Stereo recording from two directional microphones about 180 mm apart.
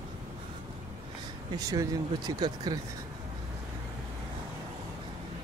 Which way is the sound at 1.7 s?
20° right (ahead or behind).